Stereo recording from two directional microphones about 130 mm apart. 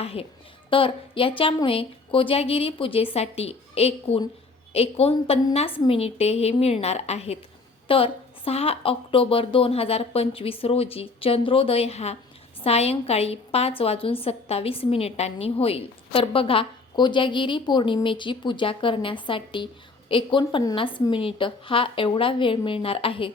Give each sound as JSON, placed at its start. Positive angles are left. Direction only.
{"t": 0.0, "sound": "a woman's voice", "side_deg": 50}